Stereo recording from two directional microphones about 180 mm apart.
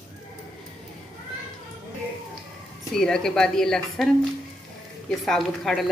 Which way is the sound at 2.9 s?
5° left (ahead or behind).